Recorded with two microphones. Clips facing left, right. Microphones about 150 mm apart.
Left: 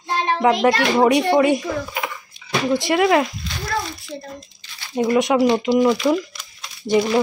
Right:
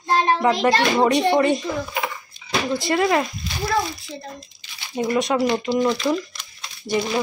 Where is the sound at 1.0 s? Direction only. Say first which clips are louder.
Left 4 dB; 10° left (ahead or behind).